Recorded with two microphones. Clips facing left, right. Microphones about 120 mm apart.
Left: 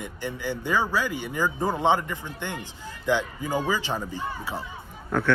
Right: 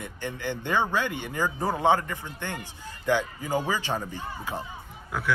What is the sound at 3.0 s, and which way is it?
Speech, 10° right (ahead or behind).